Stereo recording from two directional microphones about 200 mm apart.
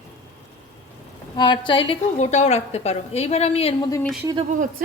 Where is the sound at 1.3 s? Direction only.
20° left (ahead or behind).